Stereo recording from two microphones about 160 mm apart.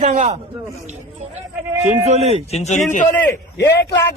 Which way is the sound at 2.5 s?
45° left (ahead or behind).